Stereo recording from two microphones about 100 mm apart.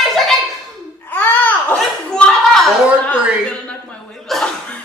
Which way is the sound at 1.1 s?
20° left (ahead or behind).